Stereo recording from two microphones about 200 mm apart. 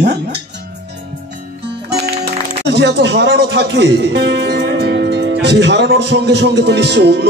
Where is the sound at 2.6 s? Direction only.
60° right (ahead or behind).